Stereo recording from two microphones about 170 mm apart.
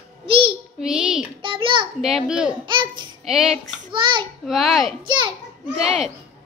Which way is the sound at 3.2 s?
Centre (ahead or behind).